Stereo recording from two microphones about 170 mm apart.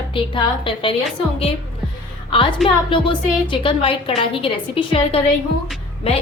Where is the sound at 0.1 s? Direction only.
30° left (ahead or behind).